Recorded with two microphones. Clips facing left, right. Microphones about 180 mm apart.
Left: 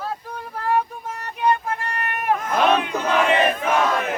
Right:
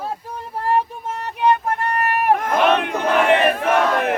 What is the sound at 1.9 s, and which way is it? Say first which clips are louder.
Battle cry: right 5 dB; 60° right (ahead or behind).